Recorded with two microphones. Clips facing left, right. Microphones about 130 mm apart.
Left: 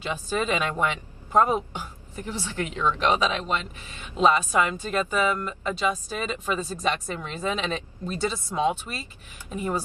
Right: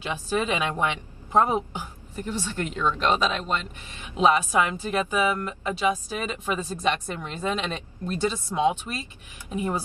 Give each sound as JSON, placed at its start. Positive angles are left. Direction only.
{"t": 0.0, "sound": "a woman's voice", "side_deg": -10}
{"t": 2.1, "sound": "speech", "side_deg": 10}
{"t": 4.2, "sound": "a woman's voice", "side_deg": -10}
{"t": 7.2, "sound": "speech", "side_deg": 5}
{"t": 8.5, "sound": "a woman's voice", "side_deg": -5}